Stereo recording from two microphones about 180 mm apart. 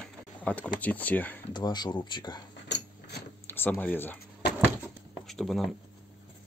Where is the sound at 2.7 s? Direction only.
70° left (ahead or behind).